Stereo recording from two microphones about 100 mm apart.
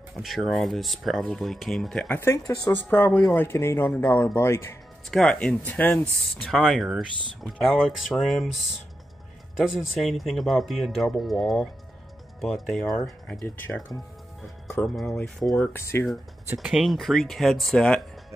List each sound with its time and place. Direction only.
0.1 s speech: centre (ahead or behind)
2.1 s speech: 25° left (ahead or behind)
2.7 s speech: 20° left (ahead or behind)
3.1 s speech: 5° left (ahead or behind)
3.3 s speech: 25° left (ahead or behind)
5.1 s speech: 5° left (ahead or behind)
6.3 s speech: centre (ahead or behind)
9.8 s speech: centre (ahead or behind)
13.3 s speech: 20° left (ahead or behind)
14.4 s speech: centre (ahead or behind)
15.5 s speech: 20° left (ahead or behind)
16.6 s speech: centre (ahead or behind)